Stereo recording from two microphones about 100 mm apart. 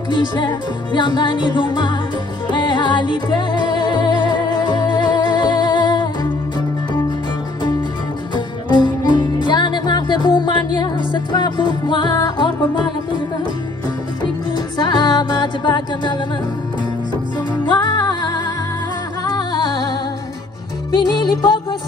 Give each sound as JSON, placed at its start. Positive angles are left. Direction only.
{"t": 0.1, "sound": "music", "side_deg": 50}
{"t": 8.6, "sound": "music", "side_deg": 50}
{"t": 14.5, "sound": "music", "side_deg": 45}
{"t": 17.6, "sound": "music", "side_deg": 40}